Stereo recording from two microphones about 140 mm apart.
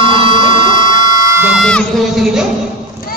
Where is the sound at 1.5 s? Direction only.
5° left (ahead or behind).